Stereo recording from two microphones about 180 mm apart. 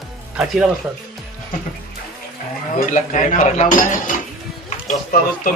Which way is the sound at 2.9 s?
45° left (ahead or behind).